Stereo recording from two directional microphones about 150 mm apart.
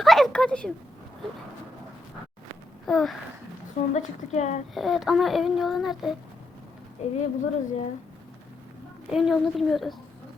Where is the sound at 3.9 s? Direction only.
50° left (ahead or behind).